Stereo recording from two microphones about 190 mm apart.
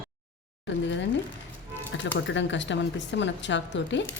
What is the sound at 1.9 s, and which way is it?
Music, 75° left (ahead or behind).